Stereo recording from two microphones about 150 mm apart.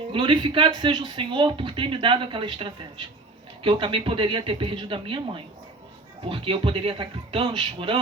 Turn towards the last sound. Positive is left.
turn(degrees=-35)  # may be behind; listen again after turning